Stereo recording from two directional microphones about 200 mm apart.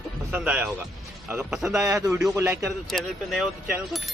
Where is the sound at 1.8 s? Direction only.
15° right (ahead or behind).